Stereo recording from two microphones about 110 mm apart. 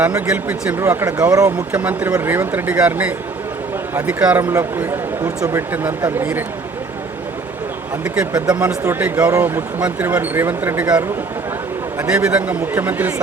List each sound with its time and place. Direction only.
0.4 s a man's voice: 20° right (ahead or behind)
1.1 s speech: 30° right (ahead or behind)
1.7 s speech: 15° right (ahead or behind)
4.5 s speech: 25° right (ahead or behind)
8.0 s speech: 10° right (ahead or behind)
8.3 s speech: 40° right (ahead or behind)
8.5 s a man's voice: 15° right (ahead or behind)